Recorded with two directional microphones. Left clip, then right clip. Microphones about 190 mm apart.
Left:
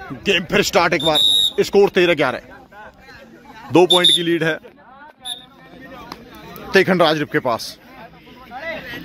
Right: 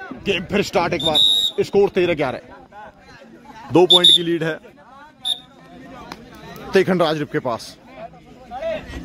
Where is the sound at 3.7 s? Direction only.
5° left (ahead or behind).